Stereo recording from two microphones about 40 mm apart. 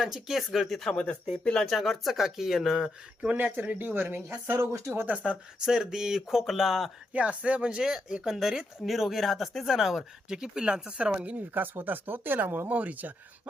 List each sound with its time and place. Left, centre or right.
0.0 s speech: centre
0.9 s speech: left
1.6 s speech: centre
2.7 s speech: centre
3.8 s a woman's voice: right
4.4 s speech: right
5.1 s speech: right
5.5 s speech: centre
7.1 s speech: right
7.8 s speech: centre
9.6 s speech: centre; by 11.4 s right
11.5 s speech: right
12.6 s speech: right